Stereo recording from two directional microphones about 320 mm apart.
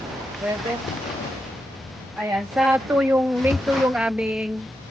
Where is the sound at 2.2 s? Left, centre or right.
Centre.